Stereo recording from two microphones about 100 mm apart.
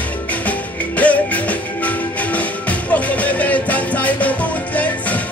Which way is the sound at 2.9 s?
15° left (ahead or behind).